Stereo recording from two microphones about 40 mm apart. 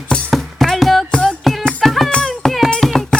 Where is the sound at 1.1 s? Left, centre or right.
Centre.